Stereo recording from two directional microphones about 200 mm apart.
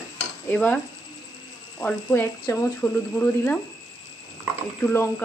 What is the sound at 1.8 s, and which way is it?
Speech, 10° left (ahead or behind).